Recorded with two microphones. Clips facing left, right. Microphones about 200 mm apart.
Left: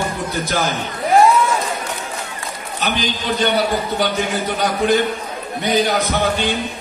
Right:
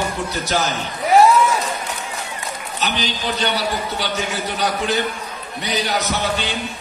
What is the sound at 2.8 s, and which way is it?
A man's voice, 50° left (ahead or behind).